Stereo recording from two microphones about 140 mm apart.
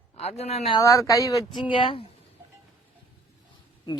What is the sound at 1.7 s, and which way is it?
Speech, 40° left (ahead or behind).